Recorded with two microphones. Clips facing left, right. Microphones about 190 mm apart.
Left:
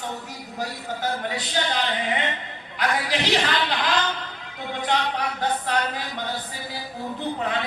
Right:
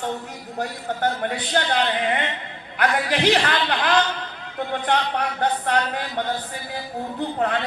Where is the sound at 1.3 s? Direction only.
60° right (ahead or behind).